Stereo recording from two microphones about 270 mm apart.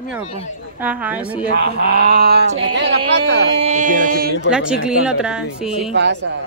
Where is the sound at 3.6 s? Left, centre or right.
Right.